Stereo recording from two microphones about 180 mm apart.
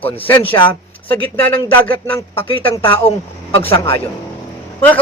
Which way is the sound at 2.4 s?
30° left (ahead or behind).